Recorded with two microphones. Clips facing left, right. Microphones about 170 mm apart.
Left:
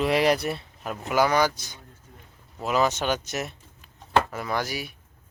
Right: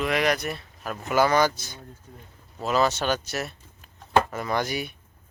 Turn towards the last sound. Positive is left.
turn(degrees=5)  # may be behind; listen again after turning